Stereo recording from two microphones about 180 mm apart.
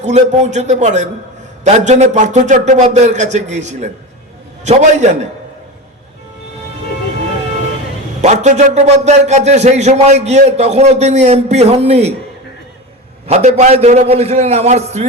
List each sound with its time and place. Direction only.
0.0 s a man's voice: 40° right (ahead or behind)
8.2 s a man's voice: 40° right (ahead or behind)
13.2 s a man's voice: 40° right (ahead or behind)